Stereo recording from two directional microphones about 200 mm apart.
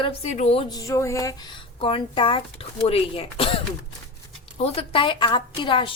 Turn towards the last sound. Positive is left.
turn(degrees=25)  # may be behind; listen again after turning